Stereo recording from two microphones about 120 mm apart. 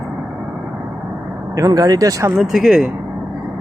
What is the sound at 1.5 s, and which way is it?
Speech, 30° right (ahead or behind).